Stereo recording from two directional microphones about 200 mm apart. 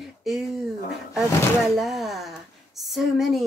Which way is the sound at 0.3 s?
Centre (ahead or behind).